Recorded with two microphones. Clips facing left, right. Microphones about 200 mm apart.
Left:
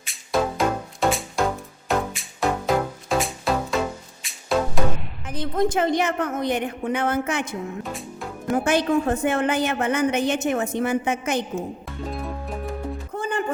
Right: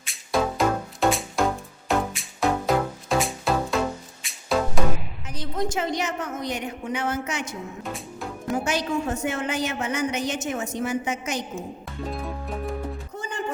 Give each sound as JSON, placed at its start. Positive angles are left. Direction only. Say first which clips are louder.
{"t": 0.0, "sound": "music", "louder": "left 1 dB", "side_deg": 0}
{"t": 5.3, "sound": "a woman's voice", "louder": "left 5 dB", "side_deg": 55}
{"t": 7.9, "sound": "music", "louder": "left 1 dB", "side_deg": 0}
{"t": 8.5, "sound": "a woman's voice", "louder": "left 6 dB", "side_deg": 55}
{"t": 12.0, "sound": "music", "louder": "left 1 dB", "side_deg": 0}
{"t": 13.1, "sound": "music", "louder": "left 10 dB", "side_deg": 55}